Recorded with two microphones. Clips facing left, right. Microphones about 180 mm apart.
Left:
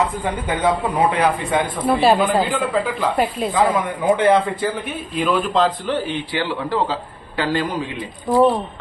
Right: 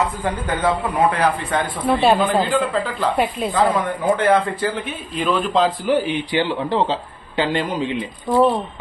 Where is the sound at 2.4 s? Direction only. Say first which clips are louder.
Even; 15° left (ahead or behind).